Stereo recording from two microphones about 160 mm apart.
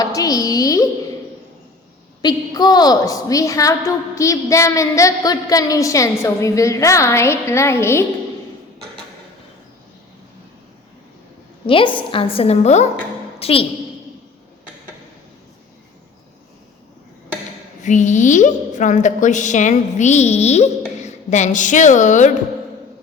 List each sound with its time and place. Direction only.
0.0 s a sound: 20° left (ahead or behind)
2.2 s a woman's voice: 25° left (ahead or behind)
11.6 s a woman's voice: 30° left (ahead or behind)
17.8 s a woman's voice: 50° left (ahead or behind)